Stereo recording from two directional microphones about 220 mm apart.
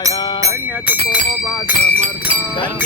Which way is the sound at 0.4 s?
5° right (ahead or behind).